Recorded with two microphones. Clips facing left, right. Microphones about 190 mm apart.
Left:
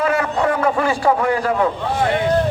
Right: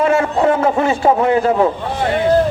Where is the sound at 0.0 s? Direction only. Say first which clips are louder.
Right 4 dB; 25° right (ahead or behind).